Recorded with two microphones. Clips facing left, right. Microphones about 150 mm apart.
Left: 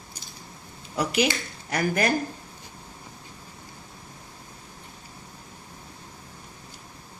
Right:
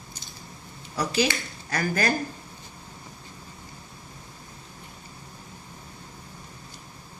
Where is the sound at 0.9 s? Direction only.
20° left (ahead or behind).